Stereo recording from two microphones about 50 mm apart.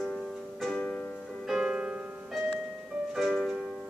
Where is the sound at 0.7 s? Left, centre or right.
Centre.